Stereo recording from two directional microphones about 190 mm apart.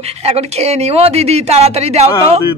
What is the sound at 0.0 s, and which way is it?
A woman's voice, 35° right (ahead or behind).